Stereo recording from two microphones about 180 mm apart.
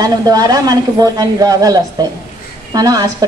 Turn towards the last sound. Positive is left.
turn(degrees=-20)  # may be behind; listen again after turning